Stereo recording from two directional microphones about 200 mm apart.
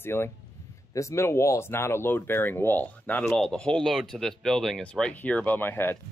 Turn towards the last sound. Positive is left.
turn(degrees=10)  # may be behind; listen again after turning